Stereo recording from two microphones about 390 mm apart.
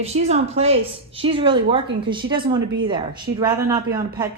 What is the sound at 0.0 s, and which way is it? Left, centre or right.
A woman's voice, centre.